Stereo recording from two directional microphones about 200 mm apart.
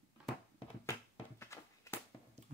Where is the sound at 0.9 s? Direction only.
15° left (ahead or behind).